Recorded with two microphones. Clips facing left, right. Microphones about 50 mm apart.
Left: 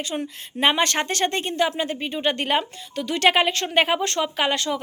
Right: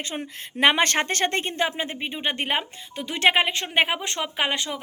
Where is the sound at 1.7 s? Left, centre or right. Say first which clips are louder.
Left 3 dB; right.